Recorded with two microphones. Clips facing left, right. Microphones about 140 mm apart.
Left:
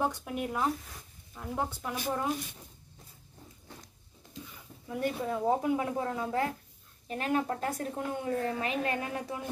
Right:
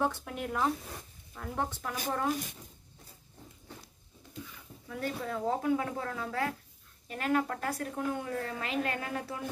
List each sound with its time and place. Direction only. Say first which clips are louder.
0.0 s speech: left 1 dB; 15° left (ahead or behind)
4.8 s a woman's voice: left 4 dB; 20° left (ahead or behind)